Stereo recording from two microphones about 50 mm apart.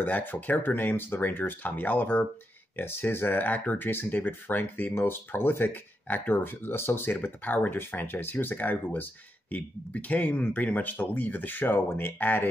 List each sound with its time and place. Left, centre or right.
0.0 s speech: left
2.7 s speech: left